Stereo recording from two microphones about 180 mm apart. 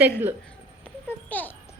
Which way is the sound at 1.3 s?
10° left (ahead or behind).